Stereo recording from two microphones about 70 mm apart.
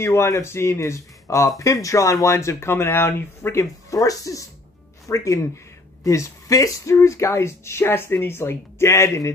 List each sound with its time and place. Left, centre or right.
0.0 s speech: left
3.9 s speech: left